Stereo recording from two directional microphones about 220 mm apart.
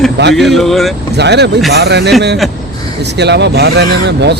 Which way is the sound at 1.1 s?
50° right (ahead or behind).